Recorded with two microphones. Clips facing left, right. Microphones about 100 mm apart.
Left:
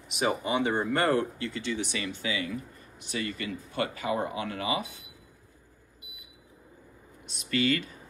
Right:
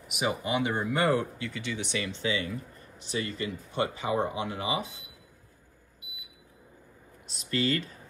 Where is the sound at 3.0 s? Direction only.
30° right (ahead or behind).